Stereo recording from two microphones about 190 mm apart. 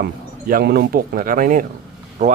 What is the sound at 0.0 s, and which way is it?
Speech, 55° right (ahead or behind).